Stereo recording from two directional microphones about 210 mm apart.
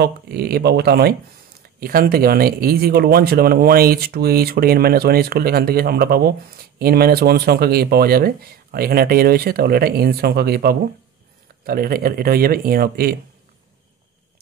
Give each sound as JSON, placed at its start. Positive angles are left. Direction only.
{"t": 0.0, "sound": "speech", "side_deg": -50}